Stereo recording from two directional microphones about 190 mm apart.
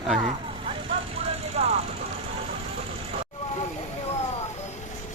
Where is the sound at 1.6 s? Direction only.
35° right (ahead or behind).